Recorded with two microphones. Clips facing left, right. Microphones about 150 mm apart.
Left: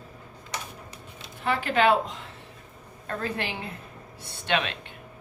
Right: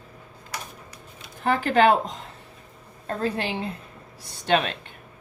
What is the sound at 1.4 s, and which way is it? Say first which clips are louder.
Speech: right 4 dB; 45° right (ahead or behind).